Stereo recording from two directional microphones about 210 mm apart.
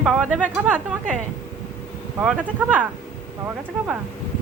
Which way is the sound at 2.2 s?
5° right (ahead or behind).